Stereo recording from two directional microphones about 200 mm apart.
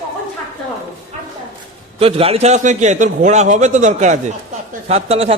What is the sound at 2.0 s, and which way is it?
A man's voice, 30° right (ahead or behind).